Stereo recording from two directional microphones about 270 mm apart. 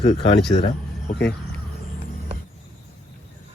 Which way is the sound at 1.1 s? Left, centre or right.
Left.